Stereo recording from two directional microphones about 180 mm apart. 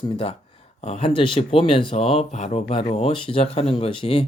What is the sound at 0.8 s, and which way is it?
Speech, 35° left (ahead or behind).